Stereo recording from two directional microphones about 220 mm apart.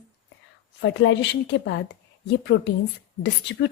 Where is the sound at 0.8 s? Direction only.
55° left (ahead or behind).